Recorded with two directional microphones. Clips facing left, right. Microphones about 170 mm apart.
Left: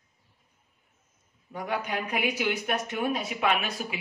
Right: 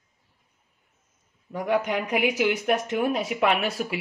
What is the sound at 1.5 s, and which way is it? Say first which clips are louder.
Speech: right 7 dB; 75° right (ahead or behind).